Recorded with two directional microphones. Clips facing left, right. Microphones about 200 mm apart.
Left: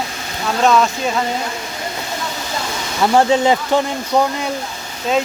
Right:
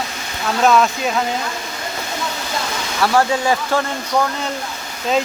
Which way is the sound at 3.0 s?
20° left (ahead or behind).